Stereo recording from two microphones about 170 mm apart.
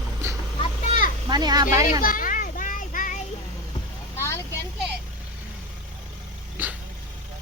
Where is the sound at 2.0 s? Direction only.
55° left (ahead or behind).